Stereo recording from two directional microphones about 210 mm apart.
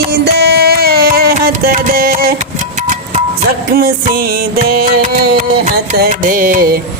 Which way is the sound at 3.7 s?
45° right (ahead or behind).